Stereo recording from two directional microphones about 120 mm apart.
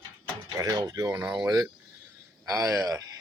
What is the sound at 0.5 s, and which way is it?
Speech, 30° right (ahead or behind).